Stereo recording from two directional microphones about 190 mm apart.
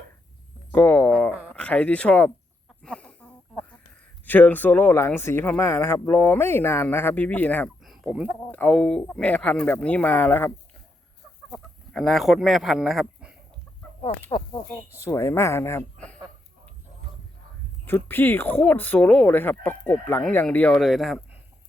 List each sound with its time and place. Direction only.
0.7 s speech: 10° left (ahead or behind)
1.1 s speech: 5° right (ahead or behind)
1.5 s speech: 5° left (ahead or behind)
2.8 s a sound: 5° left (ahead or behind)
4.3 s speech: 10° left (ahead or behind)
14.0 s speech: 25° left (ahead or behind)
17.8 s speech: 10° left (ahead or behind)